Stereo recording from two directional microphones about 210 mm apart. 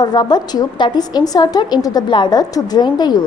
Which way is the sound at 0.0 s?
20° left (ahead or behind).